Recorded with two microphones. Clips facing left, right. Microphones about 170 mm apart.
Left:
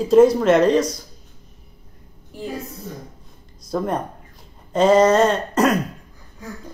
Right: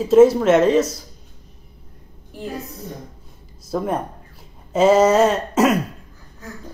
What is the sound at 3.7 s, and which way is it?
Speech, 5° right (ahead or behind).